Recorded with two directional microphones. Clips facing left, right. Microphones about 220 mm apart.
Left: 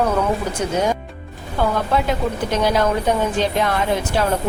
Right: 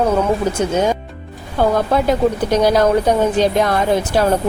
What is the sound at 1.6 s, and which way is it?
A woman's voice, 40° right (ahead or behind).